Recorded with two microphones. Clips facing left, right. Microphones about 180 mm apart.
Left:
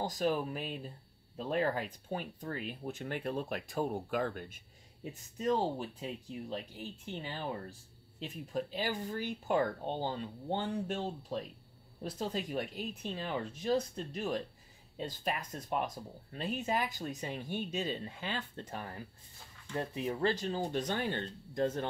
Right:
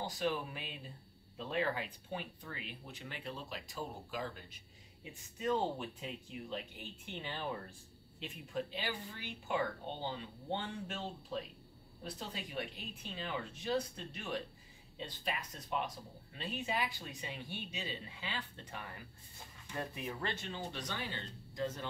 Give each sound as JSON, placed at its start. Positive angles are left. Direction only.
{"t": 0.0, "sound": "speech", "side_deg": 40}
{"t": 5.4, "sound": "speech", "side_deg": 40}